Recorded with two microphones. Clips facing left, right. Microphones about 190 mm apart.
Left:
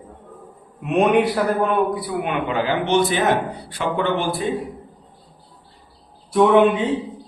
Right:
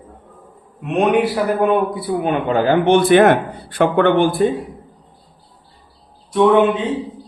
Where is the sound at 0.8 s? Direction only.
Centre (ahead or behind).